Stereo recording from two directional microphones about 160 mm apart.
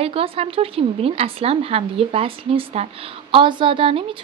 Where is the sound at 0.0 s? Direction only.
35° right (ahead or behind).